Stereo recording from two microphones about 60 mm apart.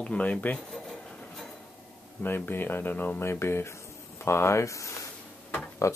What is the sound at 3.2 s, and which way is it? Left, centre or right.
Speech, left.